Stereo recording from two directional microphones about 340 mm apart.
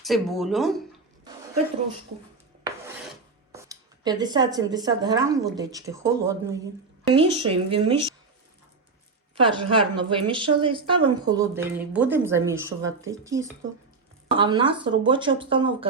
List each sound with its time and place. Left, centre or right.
0.0 s speech: centre
2.6 s filing: centre
5.5 s a woman's voice: centre
9.3 s a woman's voice: centre